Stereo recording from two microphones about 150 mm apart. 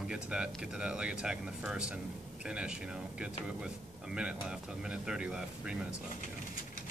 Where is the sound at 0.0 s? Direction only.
5° right (ahead or behind).